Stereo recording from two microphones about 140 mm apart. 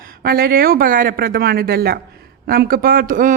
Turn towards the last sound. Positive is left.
turn(degrees=-75)  # may be behind; listen again after turning